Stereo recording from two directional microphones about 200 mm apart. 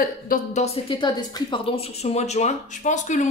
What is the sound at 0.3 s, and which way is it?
A woman's voice, 35° left (ahead or behind).